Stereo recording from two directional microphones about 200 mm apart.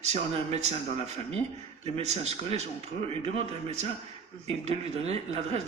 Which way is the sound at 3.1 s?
30° right (ahead or behind).